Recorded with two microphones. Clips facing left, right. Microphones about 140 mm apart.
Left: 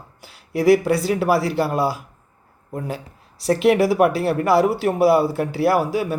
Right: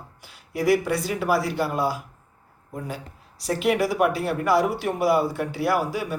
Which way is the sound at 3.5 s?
70° left (ahead or behind).